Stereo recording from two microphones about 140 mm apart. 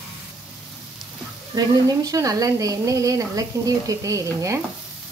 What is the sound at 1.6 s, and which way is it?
A woman's voice, 25° right (ahead or behind).